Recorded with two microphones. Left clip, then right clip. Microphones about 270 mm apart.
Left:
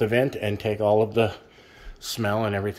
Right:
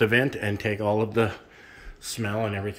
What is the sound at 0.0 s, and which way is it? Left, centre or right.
Speech, centre.